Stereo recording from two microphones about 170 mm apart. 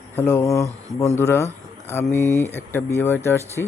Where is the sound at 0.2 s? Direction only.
15° left (ahead or behind).